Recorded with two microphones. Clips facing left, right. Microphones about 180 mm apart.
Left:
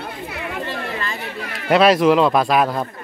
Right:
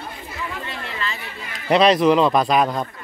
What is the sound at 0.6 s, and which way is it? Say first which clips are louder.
Speech: left 4 dB; 50° left (ahead or behind).